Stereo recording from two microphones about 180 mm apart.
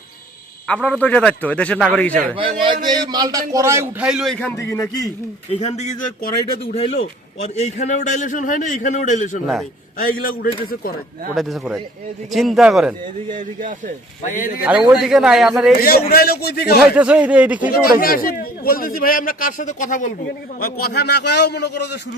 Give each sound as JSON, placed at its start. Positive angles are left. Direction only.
{"t": 0.7, "sound": "a man's voice", "side_deg": 5}
{"t": 2.3, "sound": "a man's voice", "side_deg": -30}
{"t": 5.5, "sound": "a man's voice", "side_deg": 40}
{"t": 11.3, "sound": "a man's voice", "side_deg": 0}
{"t": 13.3, "sound": "speech", "side_deg": -45}
{"t": 14.6, "sound": "a man's voice", "side_deg": -5}
{"t": 16.0, "sound": "a man's voice", "side_deg": 60}
{"t": 16.9, "sound": "a man's voice", "side_deg": -5}
{"t": 18.0, "sound": "a man's voice", "side_deg": 55}
{"t": 20.6, "sound": "a man's voice", "side_deg": 60}